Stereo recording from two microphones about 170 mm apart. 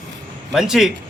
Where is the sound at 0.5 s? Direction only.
Centre (ahead or behind).